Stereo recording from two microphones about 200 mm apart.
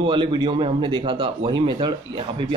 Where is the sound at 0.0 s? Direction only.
25° right (ahead or behind).